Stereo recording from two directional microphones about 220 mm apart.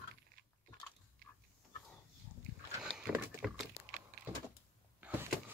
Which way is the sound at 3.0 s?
Centre (ahead or behind).